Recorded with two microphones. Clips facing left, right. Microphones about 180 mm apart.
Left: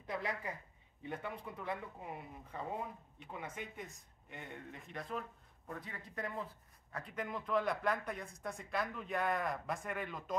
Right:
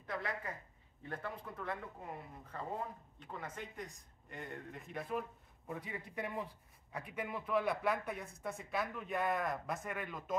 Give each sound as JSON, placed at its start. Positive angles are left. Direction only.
{"t": 0.0, "sound": "a woman's voice", "side_deg": 20}